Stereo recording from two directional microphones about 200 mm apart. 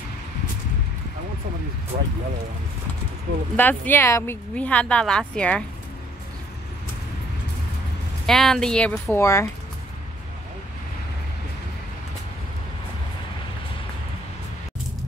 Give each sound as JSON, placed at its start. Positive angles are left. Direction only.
{"t": 1.9, "sound": "speech", "side_deg": -35}
{"t": 3.5, "sound": "speech", "side_deg": 10}
{"t": 8.3, "sound": "speech", "side_deg": 0}